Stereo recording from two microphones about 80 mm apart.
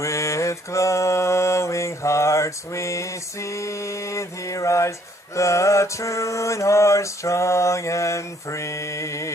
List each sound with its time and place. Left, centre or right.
0.0 s mantra: left